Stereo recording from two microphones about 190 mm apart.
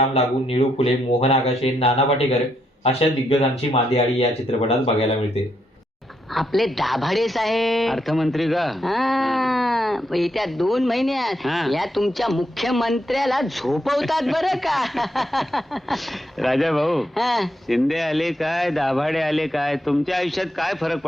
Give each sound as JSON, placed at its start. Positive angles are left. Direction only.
{"t": 0.1, "sound": "speech", "side_deg": 30}
{"t": 6.3, "sound": "a woman's voice", "side_deg": 0}